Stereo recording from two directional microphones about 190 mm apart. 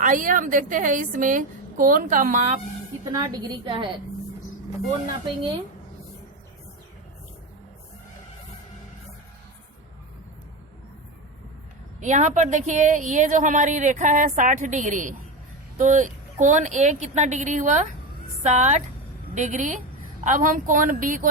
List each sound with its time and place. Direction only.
0.0 s a woman's voice: 45° right (ahead or behind)
3.1 s a woman's voice: 20° right (ahead or behind)
11.9 s a woman's voice: 40° right (ahead or behind)